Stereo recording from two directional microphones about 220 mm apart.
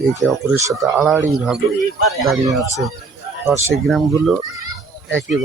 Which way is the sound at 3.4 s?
10° right (ahead or behind).